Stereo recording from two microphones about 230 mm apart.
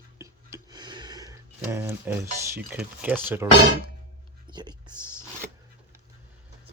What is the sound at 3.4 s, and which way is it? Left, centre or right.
Speech, centre.